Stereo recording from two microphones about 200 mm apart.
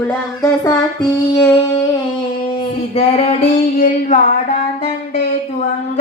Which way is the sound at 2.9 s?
30° left (ahead or behind).